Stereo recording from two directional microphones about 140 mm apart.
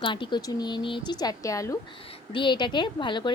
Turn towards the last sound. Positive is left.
turn(degrees=35)  # may be behind; listen again after turning